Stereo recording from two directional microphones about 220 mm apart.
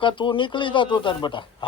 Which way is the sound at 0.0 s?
20° left (ahead or behind).